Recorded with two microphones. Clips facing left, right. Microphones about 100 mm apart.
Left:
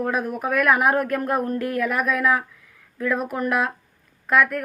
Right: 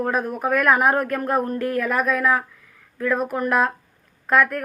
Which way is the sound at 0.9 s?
30° right (ahead or behind).